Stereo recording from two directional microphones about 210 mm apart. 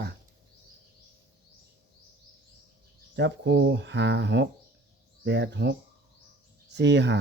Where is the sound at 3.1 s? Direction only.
55° right (ahead or behind).